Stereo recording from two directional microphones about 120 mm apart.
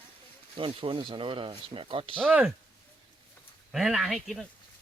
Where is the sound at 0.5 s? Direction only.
45° right (ahead or behind).